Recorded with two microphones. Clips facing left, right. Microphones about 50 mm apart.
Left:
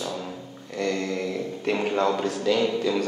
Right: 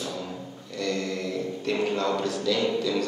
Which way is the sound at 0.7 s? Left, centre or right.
Left.